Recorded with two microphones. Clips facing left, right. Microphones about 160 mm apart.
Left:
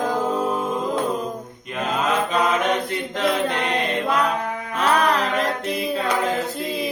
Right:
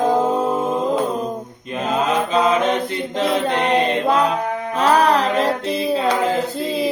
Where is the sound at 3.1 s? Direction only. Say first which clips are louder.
Right 3 dB; 25° right (ahead or behind).